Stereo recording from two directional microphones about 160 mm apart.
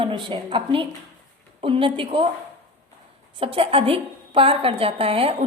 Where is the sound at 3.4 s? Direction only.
35° right (ahead or behind).